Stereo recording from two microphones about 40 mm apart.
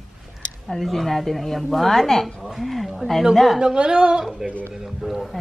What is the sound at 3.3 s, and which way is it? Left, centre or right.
Speech, centre.